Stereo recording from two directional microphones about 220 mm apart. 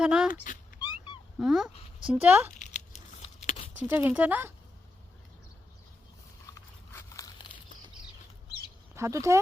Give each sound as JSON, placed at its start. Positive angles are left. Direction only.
{"t": 0.0, "sound": "speech", "side_deg": -5}
{"t": 0.3, "sound": "speech", "side_deg": 35}
{"t": 1.4, "sound": "speech", "side_deg": -5}
{"t": 2.6, "sound": "crunch", "side_deg": 35}
{"t": 3.8, "sound": "speech", "side_deg": -10}
{"t": 6.5, "sound": "biting", "side_deg": 15}
{"t": 9.0, "sound": "speech", "side_deg": -15}